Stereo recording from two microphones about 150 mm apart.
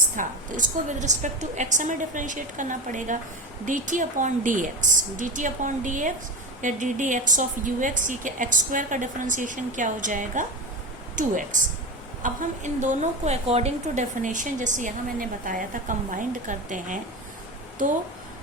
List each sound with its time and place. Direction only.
0.2 s a woman's voice: 55° right (ahead or behind)